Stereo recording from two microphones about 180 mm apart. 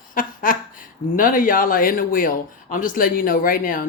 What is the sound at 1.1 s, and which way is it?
Speech, 50° left (ahead or behind).